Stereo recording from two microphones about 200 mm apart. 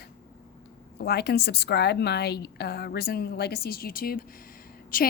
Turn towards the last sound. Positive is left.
turn(degrees=45)  # may be behind; listen again after turning